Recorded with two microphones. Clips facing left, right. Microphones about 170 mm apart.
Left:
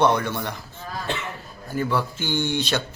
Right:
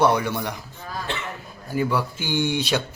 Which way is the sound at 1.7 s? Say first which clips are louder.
Right 1 dB; 10° right (ahead or behind).